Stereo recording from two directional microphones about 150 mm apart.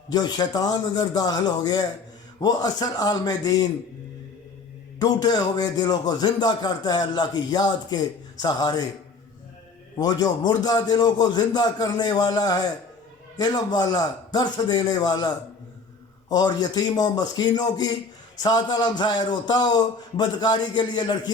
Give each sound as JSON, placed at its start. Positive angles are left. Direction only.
{"t": 0.1, "sound": "a man's voice", "side_deg": 25}
{"t": 4.9, "sound": "a man's voice", "side_deg": 25}
{"t": 10.0, "sound": "a man's voice", "side_deg": 25}